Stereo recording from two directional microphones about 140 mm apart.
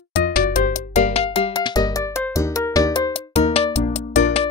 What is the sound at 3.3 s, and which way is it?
Music, 45° left (ahead or behind).